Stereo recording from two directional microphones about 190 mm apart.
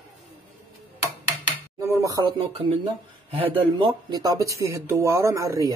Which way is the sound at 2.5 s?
30° right (ahead or behind).